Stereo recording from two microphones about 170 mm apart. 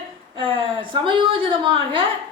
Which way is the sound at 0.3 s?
30° right (ahead or behind).